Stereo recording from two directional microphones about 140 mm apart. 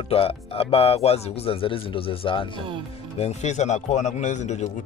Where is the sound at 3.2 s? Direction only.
50° left (ahead or behind).